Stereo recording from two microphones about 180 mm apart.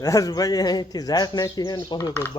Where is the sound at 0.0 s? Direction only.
20° left (ahead or behind).